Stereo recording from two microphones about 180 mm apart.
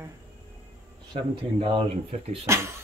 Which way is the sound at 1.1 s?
30° right (ahead or behind).